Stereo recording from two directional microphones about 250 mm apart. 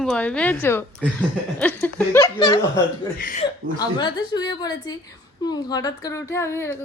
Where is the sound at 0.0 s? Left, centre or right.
Centre.